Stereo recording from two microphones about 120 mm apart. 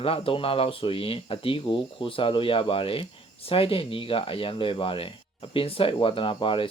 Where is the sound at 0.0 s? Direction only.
50° left (ahead or behind).